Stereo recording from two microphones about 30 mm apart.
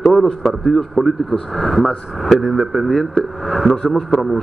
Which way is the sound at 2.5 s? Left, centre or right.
Centre.